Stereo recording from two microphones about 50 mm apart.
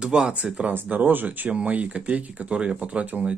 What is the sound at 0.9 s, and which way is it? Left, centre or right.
Speech, right.